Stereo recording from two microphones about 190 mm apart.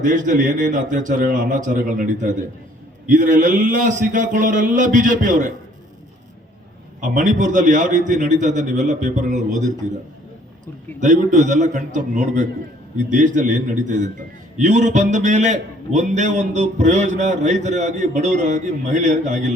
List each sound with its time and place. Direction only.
0.0 s a man's voice: 40° right (ahead or behind)
7.0 s a man's voice: 40° right (ahead or behind)
11.0 s a man's voice: 40° right (ahead or behind)